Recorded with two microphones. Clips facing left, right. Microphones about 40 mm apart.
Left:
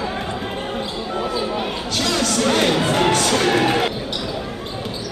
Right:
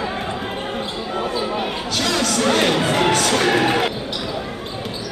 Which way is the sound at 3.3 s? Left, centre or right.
Centre.